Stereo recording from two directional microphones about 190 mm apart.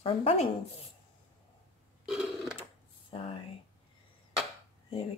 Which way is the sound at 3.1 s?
30° left (ahead or behind).